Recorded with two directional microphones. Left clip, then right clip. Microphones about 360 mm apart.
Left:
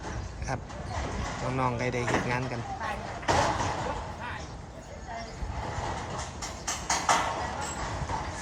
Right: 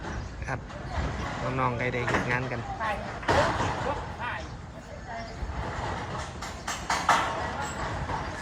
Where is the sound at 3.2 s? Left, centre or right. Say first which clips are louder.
Right 1 dB; left.